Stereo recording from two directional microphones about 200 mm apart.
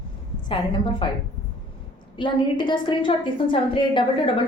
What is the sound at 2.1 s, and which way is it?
Speech, 25° left (ahead or behind).